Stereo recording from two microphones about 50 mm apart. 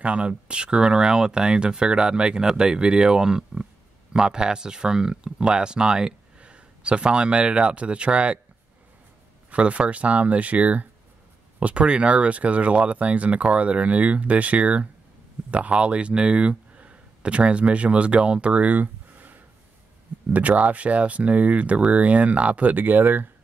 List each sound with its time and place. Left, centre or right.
0.0 s speech: right
9.5 s speech: right